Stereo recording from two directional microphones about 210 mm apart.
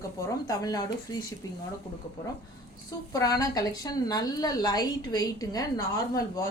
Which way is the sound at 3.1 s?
15° left (ahead or behind).